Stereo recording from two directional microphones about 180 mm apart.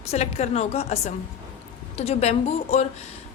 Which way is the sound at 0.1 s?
35° left (ahead or behind).